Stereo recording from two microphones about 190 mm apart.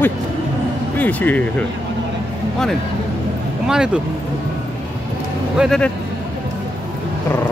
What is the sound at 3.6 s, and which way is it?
Speech, 5° right (ahead or behind).